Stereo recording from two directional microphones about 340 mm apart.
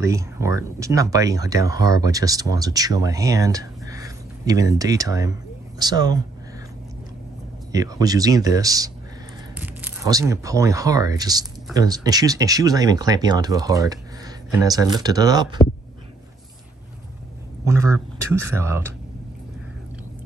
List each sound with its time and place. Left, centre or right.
0.0 s speech: centre
7.7 s speech: centre
17.8 s a man's voice: left
18.3 s speech: centre